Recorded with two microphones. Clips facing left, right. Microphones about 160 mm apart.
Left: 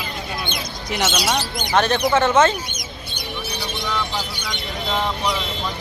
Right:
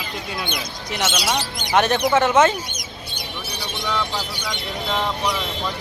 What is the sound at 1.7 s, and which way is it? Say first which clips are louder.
Speech: even; 15° right (ahead or behind).